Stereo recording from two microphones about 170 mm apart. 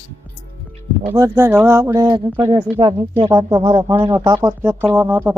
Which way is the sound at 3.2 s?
20° right (ahead or behind).